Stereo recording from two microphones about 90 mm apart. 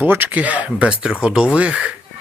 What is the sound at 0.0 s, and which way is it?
Speech, 20° right (ahead or behind).